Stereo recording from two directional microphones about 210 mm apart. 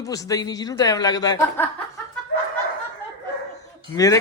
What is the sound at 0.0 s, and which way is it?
Speech, 15° left (ahead or behind).